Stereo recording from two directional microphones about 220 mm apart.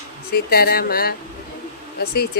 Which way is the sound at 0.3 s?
45° left (ahead or behind).